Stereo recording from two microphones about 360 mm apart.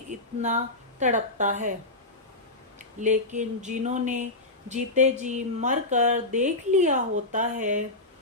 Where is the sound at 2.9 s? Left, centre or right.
Centre.